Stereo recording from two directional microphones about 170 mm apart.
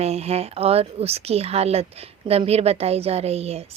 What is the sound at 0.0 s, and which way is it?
Speech, 40° right (ahead or behind).